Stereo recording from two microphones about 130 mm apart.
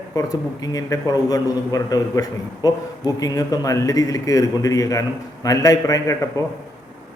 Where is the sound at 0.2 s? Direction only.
30° left (ahead or behind).